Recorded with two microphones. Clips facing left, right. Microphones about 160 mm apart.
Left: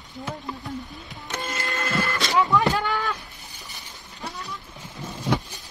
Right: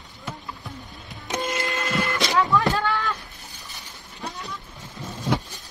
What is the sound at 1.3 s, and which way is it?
Printer, 15° right (ahead or behind).